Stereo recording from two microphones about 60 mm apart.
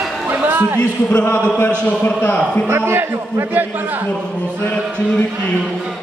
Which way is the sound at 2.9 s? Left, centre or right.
Right.